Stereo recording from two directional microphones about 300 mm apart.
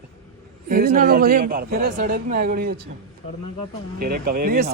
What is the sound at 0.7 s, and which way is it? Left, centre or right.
Speech, right.